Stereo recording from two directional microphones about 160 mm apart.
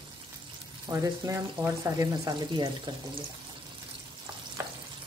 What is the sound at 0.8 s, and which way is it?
Speech, 20° right (ahead or behind).